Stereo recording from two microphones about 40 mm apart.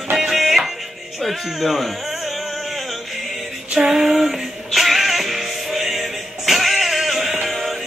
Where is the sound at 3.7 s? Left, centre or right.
Centre.